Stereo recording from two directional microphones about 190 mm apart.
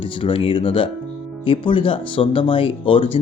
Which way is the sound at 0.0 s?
30° left (ahead or behind).